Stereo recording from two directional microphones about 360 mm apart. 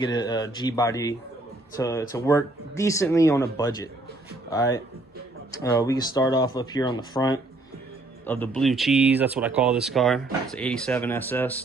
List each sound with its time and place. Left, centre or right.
0.0 s speech: centre